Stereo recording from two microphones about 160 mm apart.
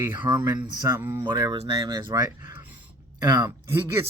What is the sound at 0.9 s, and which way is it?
Speech, 15° right (ahead or behind).